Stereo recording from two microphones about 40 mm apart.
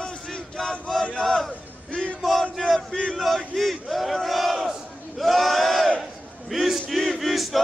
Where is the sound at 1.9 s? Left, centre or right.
Left.